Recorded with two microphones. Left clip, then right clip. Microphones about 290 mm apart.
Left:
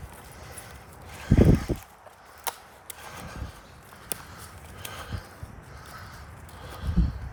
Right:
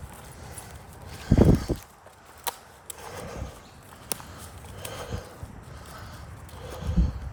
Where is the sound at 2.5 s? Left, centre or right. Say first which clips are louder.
Even; centre.